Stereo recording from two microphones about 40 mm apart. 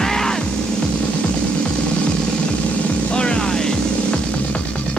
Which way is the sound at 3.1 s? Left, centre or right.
Left.